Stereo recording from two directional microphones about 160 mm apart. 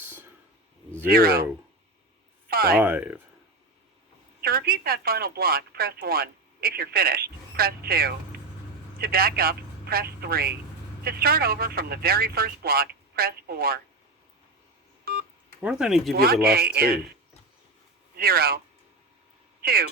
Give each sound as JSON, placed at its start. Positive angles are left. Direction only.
{"t": 0.0, "sound": "a sound", "side_deg": -15}
{"t": 1.0, "sound": "speech", "side_deg": -70}
{"t": 2.5, "sound": "a sound", "side_deg": -75}
{"t": 2.7, "sound": "speech", "side_deg": -10}
{"t": 4.4, "sound": "speech", "side_deg": -75}
{"t": 15.1, "sound": "speech", "side_deg": -70}
{"t": 15.6, "sound": "speech", "side_deg": -5}
{"t": 16.1, "sound": "speech", "side_deg": -70}
{"t": 18.2, "sound": "speech", "side_deg": -70}
{"t": 19.6, "sound": "speech", "side_deg": -75}